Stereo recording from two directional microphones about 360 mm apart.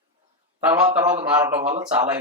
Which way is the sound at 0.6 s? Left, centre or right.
Centre.